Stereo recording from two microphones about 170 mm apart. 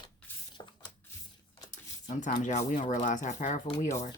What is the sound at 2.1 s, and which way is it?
Speech, 50° left (ahead or behind).